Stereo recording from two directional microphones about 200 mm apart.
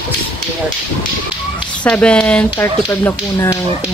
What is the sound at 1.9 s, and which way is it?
Speech, 5° left (ahead or behind).